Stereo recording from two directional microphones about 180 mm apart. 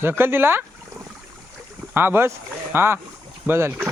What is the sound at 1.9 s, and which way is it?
Speech, 10° right (ahead or behind).